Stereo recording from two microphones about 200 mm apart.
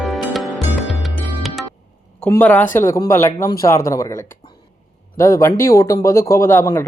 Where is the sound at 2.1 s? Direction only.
5° left (ahead or behind).